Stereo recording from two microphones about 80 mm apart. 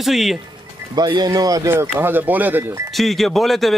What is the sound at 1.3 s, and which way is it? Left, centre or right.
Speech, right.